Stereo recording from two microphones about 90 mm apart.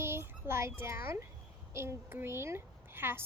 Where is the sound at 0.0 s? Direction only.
25° right (ahead or behind).